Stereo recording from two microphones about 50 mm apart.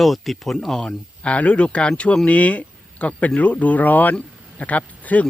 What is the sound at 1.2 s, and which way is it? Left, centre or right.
A man's voice, left.